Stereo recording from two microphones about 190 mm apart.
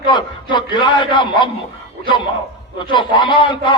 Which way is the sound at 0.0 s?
25° left (ahead or behind).